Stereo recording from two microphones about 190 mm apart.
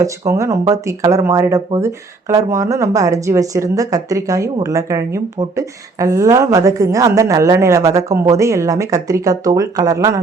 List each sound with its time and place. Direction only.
0.0 s a woman's voice: 15° right (ahead or behind)